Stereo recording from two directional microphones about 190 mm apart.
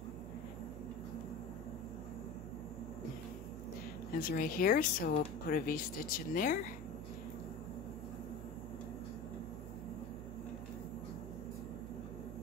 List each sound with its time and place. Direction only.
4.2 s speech: 50° left (ahead or behind)